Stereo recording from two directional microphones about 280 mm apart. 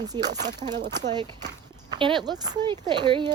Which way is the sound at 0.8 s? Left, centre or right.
Right.